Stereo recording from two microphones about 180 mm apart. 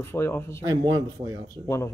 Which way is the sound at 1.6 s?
15° left (ahead or behind).